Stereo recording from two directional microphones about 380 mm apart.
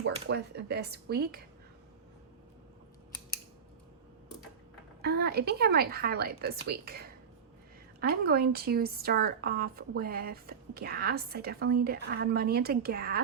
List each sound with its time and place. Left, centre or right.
0.0 s a woman's voice: right
5.0 s a woman's voice: right
8.0 s a woman's voice: right